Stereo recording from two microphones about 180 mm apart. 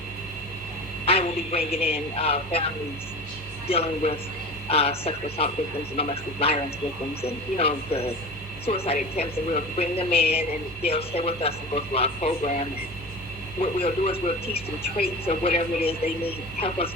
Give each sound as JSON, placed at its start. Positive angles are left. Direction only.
{"t": 1.0, "sound": "speech", "side_deg": 35}
{"t": 3.7, "sound": "speech", "side_deg": 35}